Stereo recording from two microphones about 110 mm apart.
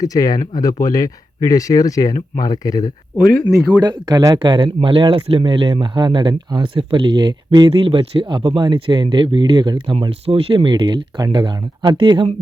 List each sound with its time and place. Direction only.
0.0 s speech: 35° left (ahead or behind)
3.7 s speech: 40° right (ahead or behind)